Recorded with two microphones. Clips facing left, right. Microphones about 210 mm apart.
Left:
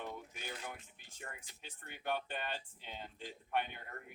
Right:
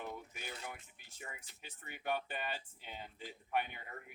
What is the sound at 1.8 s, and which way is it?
Speech, 5° right (ahead or behind).